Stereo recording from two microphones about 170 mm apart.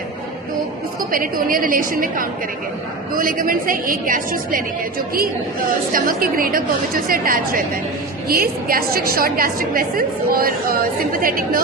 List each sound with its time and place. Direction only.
1.1 s a woman's voice: 55° right (ahead or behind)